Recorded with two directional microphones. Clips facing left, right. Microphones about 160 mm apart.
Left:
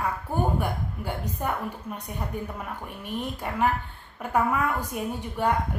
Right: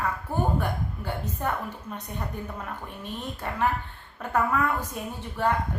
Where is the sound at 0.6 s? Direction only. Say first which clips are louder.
Even; 10° left (ahead or behind).